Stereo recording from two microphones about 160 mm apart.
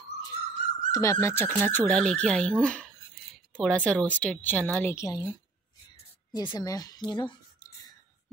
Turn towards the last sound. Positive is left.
turn(degrees=25)  # may be behind; listen again after turning